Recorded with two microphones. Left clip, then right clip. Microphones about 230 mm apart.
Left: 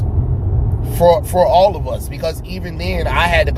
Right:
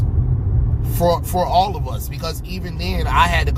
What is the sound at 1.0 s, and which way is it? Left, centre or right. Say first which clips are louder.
Speech: left 7 dB; centre.